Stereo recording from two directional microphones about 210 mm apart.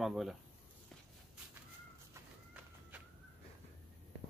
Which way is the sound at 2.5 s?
5° right (ahead or behind).